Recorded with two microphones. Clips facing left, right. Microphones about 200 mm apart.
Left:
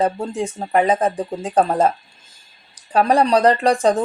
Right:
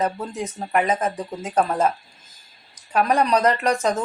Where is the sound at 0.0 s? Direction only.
30° left (ahead or behind).